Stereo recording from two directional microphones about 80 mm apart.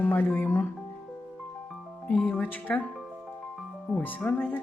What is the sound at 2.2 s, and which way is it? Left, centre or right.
Speech, left.